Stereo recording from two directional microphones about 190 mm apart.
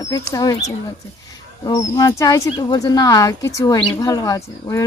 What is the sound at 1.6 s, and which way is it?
Speech, 20° left (ahead or behind).